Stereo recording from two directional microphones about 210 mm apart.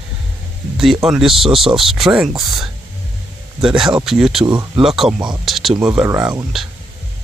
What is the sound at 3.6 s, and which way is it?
Speech, 5° right (ahead or behind).